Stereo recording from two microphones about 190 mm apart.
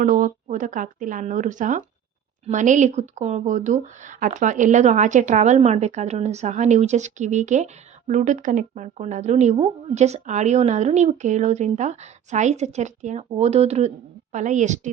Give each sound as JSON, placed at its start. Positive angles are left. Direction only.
{"t": 0.0, "sound": "speech", "side_deg": -45}